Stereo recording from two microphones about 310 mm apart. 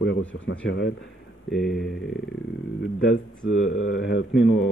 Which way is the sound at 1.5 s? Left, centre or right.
Centre.